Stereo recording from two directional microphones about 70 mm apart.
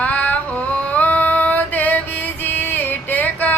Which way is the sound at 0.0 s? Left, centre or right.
Centre.